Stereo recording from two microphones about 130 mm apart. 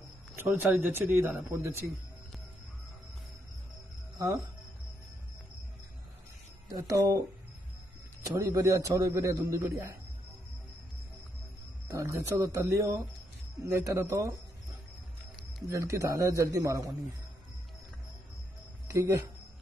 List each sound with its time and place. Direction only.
0.4 s a man's voice: 15° right (ahead or behind)
6.7 s a man's voice: 25° right (ahead or behind)
8.4 s a man's voice: 25° right (ahead or behind)
11.9 s a man's voice: 20° right (ahead or behind)
15.7 s a man's voice: 25° right (ahead or behind)
18.9 s speech: 25° right (ahead or behind)